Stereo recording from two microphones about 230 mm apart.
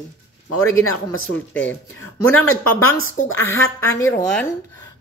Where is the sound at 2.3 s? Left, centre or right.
Left.